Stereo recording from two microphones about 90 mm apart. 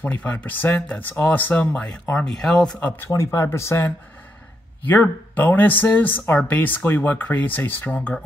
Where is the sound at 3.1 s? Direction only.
35° left (ahead or behind).